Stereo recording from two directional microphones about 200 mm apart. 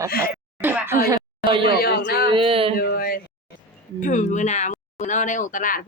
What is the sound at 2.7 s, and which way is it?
Speech, 50° left (ahead or behind).